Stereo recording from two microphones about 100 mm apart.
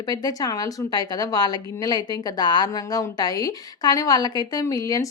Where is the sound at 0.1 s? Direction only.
40° left (ahead or behind).